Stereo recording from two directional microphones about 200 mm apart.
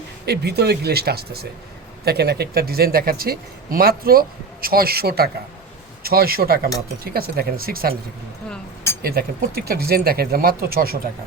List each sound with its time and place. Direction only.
0.3 s speech: 55° right (ahead or behind)
8.4 s speech: 10° left (ahead or behind)
9.0 s speech: 50° right (ahead or behind)